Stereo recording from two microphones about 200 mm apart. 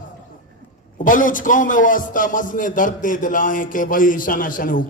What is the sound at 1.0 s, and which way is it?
A man's voice, 40° left (ahead or behind).